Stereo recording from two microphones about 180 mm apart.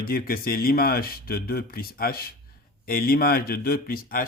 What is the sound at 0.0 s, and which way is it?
Speech, 55° left (ahead or behind).